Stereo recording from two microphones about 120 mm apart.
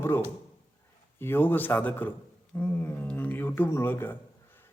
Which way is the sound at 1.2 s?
15° left (ahead or behind).